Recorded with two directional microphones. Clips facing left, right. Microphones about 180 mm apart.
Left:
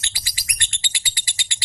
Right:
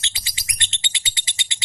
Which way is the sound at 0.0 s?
20° right (ahead or behind).